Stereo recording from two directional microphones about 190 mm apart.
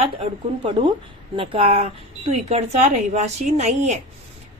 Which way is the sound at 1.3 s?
30° right (ahead or behind).